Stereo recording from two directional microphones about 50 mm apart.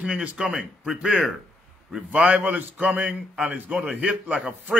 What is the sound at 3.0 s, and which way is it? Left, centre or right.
A man's voice, centre.